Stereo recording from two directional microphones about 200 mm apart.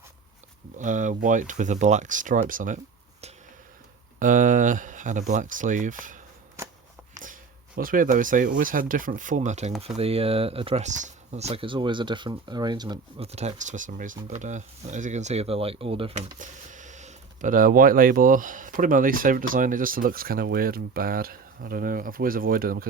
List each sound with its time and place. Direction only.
0.8 s speech: 40° right (ahead or behind)
7.8 s speech: 45° right (ahead or behind)